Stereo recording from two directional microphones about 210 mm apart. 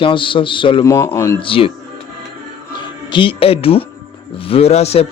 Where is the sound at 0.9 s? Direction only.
10° left (ahead or behind).